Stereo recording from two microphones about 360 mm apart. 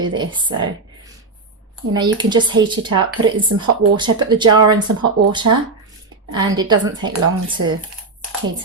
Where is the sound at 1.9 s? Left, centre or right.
Centre.